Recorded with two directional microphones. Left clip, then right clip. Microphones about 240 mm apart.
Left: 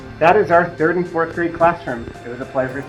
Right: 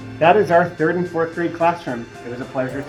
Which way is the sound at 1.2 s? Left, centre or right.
Right.